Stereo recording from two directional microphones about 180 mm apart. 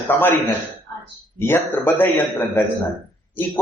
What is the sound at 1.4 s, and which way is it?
Speech, 15° left (ahead or behind).